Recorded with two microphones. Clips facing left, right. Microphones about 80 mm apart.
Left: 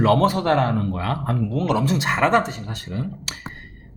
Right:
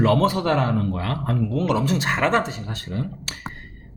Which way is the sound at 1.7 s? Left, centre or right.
Left.